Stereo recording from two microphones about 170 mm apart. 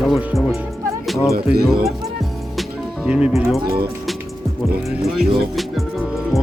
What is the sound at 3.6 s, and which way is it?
Speech, 60° right (ahead or behind).